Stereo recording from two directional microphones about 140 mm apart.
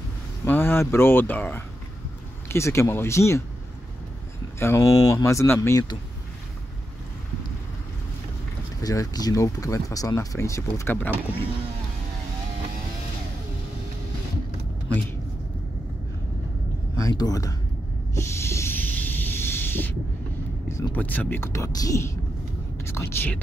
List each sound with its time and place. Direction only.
0.5 s speech: 15° left (ahead or behind)
4.6 s speech: 20° left (ahead or behind)
8.8 s speech: 25° left (ahead or behind)
16.9 s a sound: 25° left (ahead or behind)
18.1 s hiss: 20° left (ahead or behind)
20.6 s speech: 20° left (ahead or behind)